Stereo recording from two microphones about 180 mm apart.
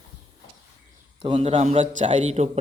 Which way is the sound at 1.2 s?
30° right (ahead or behind).